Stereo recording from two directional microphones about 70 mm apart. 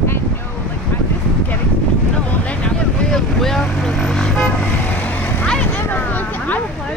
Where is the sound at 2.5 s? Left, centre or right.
Centre.